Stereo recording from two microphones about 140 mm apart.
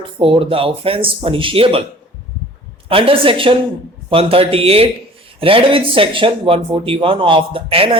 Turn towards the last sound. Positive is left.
turn(degrees=-40)  # may be behind; listen again after turning